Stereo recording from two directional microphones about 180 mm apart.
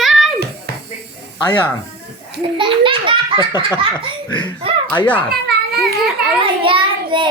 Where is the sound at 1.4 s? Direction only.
10° left (ahead or behind).